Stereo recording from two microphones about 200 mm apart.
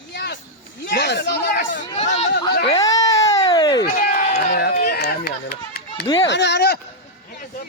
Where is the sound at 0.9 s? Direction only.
55° left (ahead or behind).